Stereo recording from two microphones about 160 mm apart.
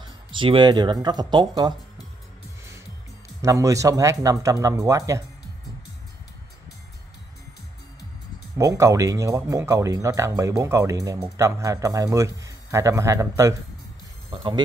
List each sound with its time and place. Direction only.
0.3 s speech: 30° right (ahead or behind)
3.4 s speech: 20° right (ahead or behind)
8.5 s speech: 20° right (ahead or behind)
14.3 s speech: 30° right (ahead or behind)